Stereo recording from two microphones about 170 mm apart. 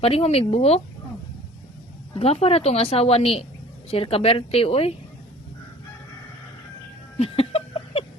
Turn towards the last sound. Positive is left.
turn(degrees=35)  # may be behind; listen again after turning